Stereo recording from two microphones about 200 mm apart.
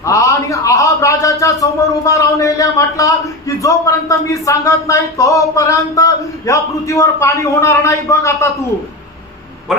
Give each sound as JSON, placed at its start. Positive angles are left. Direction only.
{"t": 0.0, "sound": "a man's voice", "side_deg": 15}